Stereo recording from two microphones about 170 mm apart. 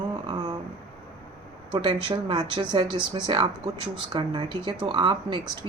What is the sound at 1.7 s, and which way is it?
Speech, 30° right (ahead or behind).